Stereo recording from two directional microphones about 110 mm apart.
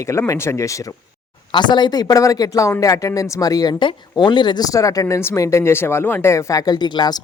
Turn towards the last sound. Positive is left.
turn(degrees=40)  # may be behind; listen again after turning